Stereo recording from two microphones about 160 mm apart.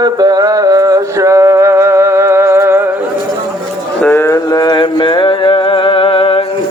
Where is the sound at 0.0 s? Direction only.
25° right (ahead or behind).